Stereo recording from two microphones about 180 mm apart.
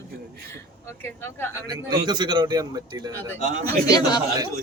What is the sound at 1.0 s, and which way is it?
Speech, 10° left (ahead or behind).